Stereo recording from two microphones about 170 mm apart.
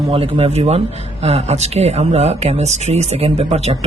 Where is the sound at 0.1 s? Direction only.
35° right (ahead or behind).